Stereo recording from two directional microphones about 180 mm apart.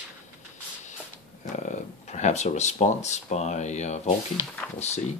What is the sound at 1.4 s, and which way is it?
Speech, 40° left (ahead or behind).